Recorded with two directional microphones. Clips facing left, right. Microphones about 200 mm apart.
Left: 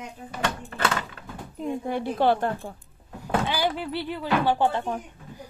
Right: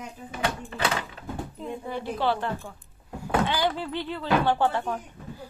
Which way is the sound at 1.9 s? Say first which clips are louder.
Left 4 dB; 55° left (ahead or behind).